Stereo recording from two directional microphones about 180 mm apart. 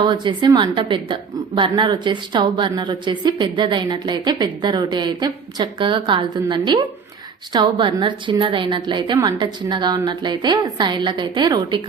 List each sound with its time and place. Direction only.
0.0 s a woman's voice: 25° right (ahead or behind)